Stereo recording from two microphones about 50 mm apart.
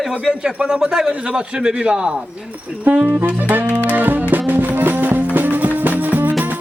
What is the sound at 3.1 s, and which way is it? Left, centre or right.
Saxophone, right.